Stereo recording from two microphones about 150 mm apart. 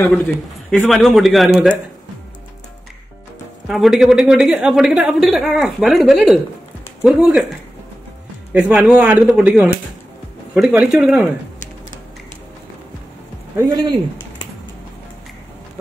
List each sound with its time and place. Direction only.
0.7 s a woman's voice: centre (ahead or behind)
3.6 s a woman's voice: centre (ahead or behind)
8.5 s a woman's voice: 5° right (ahead or behind)
13.6 s speech: 25° right (ahead or behind)